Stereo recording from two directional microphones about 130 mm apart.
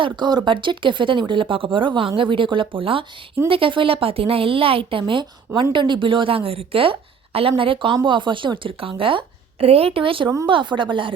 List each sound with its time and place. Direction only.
0.0 s speech: 35° right (ahead or behind)